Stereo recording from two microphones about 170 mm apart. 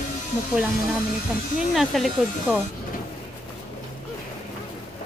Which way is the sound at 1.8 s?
Centre (ahead or behind).